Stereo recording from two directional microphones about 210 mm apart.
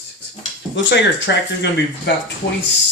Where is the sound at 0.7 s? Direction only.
60° left (ahead or behind).